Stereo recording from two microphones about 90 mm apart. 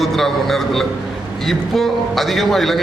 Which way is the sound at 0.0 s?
5° left (ahead or behind).